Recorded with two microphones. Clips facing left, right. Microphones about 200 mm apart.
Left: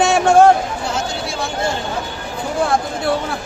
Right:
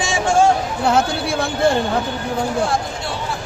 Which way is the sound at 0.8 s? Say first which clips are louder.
Right 6 dB; 60° right (ahead or behind).